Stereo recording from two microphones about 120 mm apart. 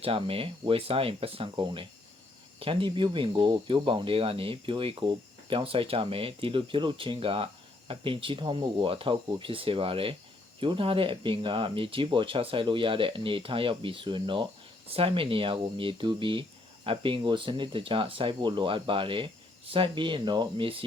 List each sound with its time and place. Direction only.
0.0 s speech: 50° right (ahead or behind)